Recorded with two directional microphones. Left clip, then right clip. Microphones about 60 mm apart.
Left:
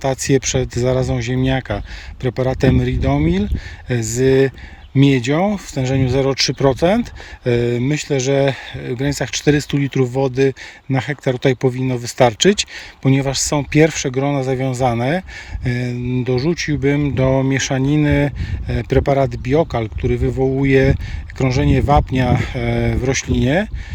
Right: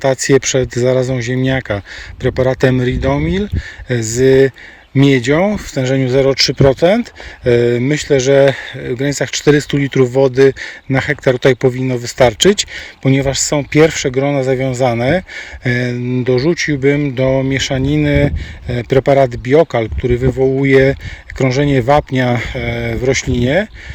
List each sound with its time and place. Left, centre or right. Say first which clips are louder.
0.0 s speech: right 5 dB; centre; by 7.1 s left
7.4 s speech: right 6 dB; centre
15.6 s speech: right 7 dB; centre
16.1 s speech: right 5 dB; centre
17.2 s speech: right 3 dB; left